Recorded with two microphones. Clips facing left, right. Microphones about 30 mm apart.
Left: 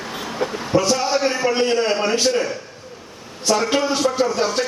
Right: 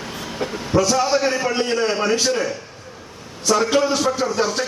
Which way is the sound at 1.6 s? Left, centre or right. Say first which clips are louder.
Left 1 dB; centre.